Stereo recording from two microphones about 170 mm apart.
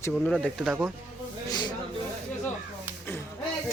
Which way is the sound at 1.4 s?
25° left (ahead or behind).